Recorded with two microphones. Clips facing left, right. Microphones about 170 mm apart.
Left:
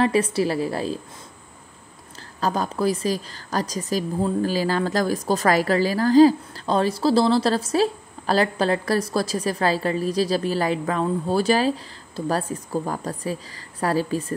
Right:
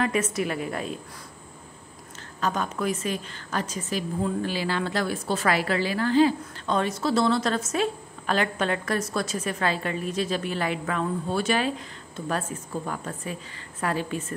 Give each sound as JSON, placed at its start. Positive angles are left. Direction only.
{"t": 0.0, "sound": "a woman's voice", "side_deg": 30}
{"t": 2.4, "sound": "a woman's voice", "side_deg": 35}